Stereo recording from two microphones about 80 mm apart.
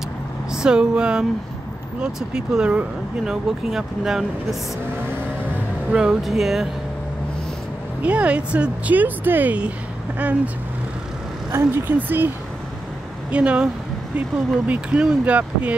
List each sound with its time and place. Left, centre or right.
0.5 s speech: centre
5.9 s speech: centre
8.0 s speech: centre
11.5 s speech: right
13.3 s speech: centre
14.7 s speech: centre